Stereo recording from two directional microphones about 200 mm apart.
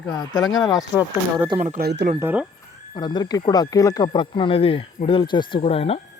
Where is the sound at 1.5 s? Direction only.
40° right (ahead or behind).